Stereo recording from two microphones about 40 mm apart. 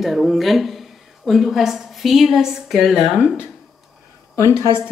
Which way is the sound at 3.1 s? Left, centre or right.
Right.